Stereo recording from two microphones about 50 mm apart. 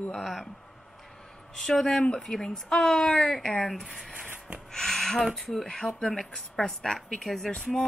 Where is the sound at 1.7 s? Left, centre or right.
Centre.